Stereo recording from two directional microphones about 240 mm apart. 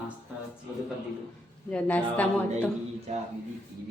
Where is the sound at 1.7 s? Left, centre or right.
Centre.